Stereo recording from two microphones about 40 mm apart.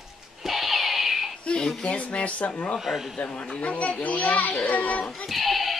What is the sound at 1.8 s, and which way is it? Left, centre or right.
Speech, left.